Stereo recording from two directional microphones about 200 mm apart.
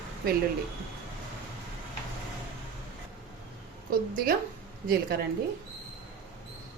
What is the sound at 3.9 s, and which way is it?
Speech, 45° right (ahead or behind).